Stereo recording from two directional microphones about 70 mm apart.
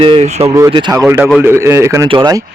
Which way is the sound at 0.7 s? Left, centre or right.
Right.